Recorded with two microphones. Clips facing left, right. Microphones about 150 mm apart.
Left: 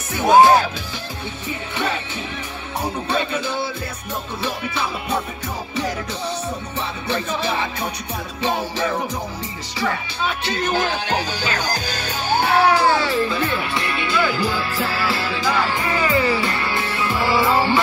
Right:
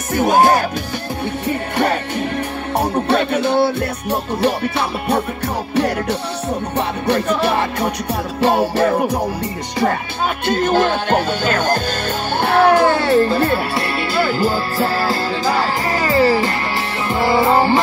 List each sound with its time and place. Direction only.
0.1 s music: 50° right (ahead or behind)
1.5 s music: 65° right (ahead or behind)
6.8 s music: 65° right (ahead or behind)
9.8 s music: 50° right (ahead or behind)
12.3 s speech: 55° right (ahead or behind); by 16.5 s 35° right (ahead or behind)
17.1 s music: 35° right (ahead or behind)